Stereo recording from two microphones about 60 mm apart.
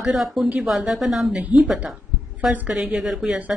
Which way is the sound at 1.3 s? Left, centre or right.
Right.